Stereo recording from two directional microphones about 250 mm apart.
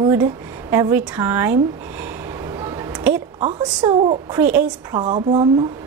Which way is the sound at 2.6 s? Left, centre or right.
Centre.